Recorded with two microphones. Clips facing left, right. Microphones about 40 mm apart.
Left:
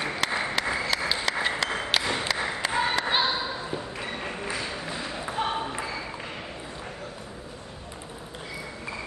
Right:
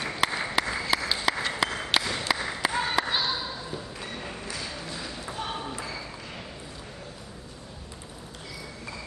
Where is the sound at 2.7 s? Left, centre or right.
Centre.